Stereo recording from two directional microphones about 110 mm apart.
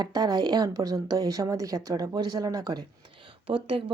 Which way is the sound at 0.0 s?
35° right (ahead or behind).